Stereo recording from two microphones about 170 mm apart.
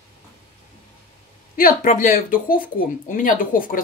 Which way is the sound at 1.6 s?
50° left (ahead or behind).